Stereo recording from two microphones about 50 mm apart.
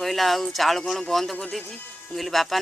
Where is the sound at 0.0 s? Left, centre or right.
Centre.